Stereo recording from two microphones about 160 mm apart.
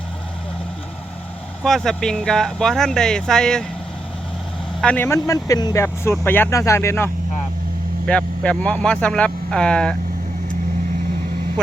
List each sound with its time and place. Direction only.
1.6 s speech: centre (ahead or behind)
4.8 s speech: 10° left (ahead or behind)